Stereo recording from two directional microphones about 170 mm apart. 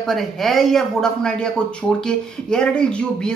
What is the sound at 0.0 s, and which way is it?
Speech, centre (ahead or behind).